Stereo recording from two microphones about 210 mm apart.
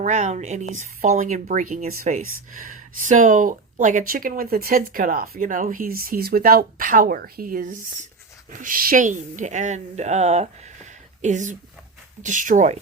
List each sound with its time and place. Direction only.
0.0 s speech: 35° right (ahead or behind)